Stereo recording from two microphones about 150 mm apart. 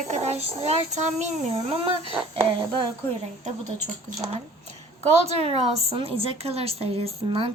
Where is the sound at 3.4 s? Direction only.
50° right (ahead or behind).